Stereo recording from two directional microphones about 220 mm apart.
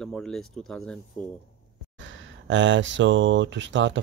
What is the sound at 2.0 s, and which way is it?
Speech, 55° right (ahead or behind).